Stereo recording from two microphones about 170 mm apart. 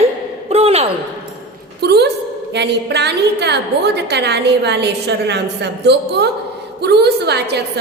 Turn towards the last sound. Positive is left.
turn(degrees=-75)  # may be behind; listen again after turning